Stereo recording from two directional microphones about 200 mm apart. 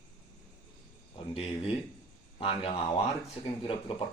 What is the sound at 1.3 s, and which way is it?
Speech, 30° left (ahead or behind).